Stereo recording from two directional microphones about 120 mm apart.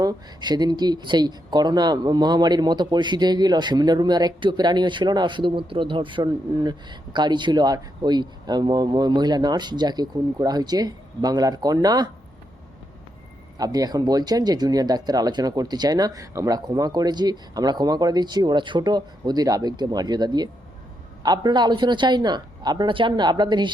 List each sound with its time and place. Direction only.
0.0 s speech: 35° right (ahead or behind)
13.6 s speech: 30° right (ahead or behind)